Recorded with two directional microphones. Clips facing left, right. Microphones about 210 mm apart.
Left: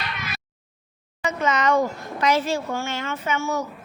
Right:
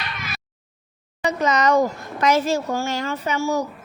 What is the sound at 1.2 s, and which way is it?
A woman's voice, 35° right (ahead or behind).